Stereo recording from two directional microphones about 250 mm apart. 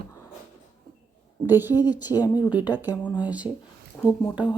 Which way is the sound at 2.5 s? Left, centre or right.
Centre.